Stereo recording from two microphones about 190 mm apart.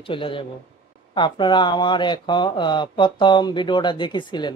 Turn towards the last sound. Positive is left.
turn(degrees=25)  # may be behind; listen again after turning